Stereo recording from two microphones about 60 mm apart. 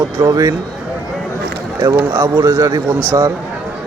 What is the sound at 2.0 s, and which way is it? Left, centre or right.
Speech, right.